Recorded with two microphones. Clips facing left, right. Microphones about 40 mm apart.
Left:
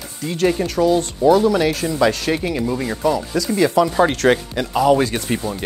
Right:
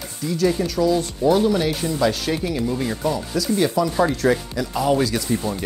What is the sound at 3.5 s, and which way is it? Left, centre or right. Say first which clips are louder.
Speech: left 4 dB; left.